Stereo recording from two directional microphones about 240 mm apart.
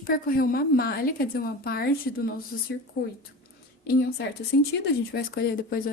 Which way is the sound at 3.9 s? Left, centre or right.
Left.